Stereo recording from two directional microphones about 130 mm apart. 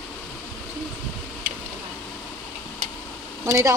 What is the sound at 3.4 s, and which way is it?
Speech, 20° right (ahead or behind).